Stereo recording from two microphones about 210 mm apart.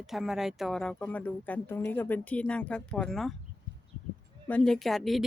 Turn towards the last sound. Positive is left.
turn(degrees=0)  # may be behind; listen again after turning